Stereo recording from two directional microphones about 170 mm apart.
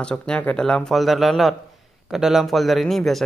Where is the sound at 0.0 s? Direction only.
5° left (ahead or behind).